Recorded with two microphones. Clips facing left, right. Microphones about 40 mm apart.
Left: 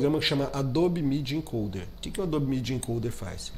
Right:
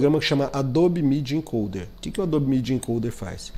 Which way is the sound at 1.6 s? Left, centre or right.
Right.